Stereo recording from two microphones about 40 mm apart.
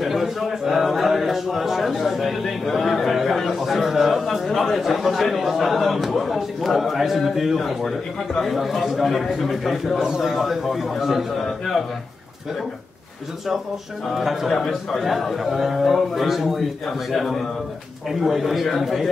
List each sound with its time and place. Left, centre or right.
0.0 s a man's voice: centre
9.9 s a man's voice: centre
14.2 s a man's voice: centre